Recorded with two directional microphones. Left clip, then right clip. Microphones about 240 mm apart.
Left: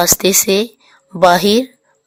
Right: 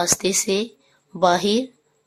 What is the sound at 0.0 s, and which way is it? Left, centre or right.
A woman's voice, left.